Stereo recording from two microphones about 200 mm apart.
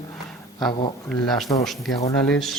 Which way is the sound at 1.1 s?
Centre (ahead or behind).